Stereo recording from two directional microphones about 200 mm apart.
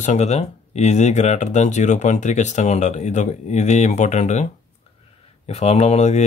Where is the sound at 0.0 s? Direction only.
35° left (ahead or behind).